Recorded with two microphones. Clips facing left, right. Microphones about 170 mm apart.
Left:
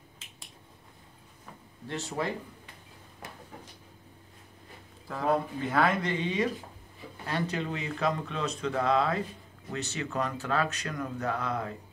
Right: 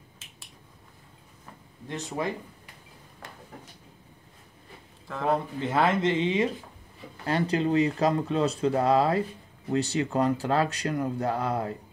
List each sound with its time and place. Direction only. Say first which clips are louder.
1.9 s speech: right 2 dB; 15° right (ahead or behind)
5.0 s speech: right 2 dB; 5° left (ahead or behind)
5.6 s speech: right 3 dB; 25° right (ahead or behind)